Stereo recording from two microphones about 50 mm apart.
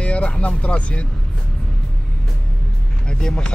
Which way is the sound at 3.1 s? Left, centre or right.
Centre.